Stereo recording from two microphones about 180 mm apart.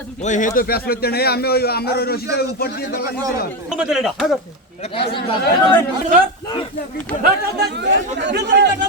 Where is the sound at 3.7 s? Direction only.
5° right (ahead or behind).